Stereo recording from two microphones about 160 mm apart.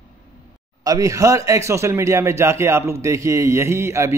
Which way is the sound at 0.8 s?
20° right (ahead or behind).